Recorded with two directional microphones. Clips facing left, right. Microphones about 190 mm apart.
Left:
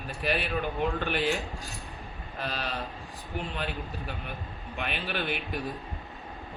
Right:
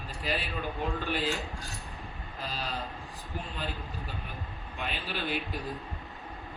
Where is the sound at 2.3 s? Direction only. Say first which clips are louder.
Left 4 dB; 70° left (ahead or behind).